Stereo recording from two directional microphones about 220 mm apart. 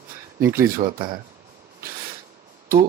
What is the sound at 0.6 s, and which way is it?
Speech, 40° right (ahead or behind).